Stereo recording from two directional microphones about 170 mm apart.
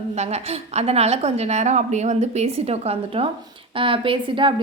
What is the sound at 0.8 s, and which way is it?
A woman's voice, 40° right (ahead or behind).